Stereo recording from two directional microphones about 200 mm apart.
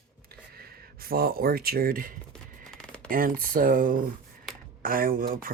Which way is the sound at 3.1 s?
45° right (ahead or behind).